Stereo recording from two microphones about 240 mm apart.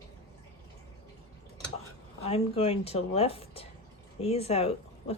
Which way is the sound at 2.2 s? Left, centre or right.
Left.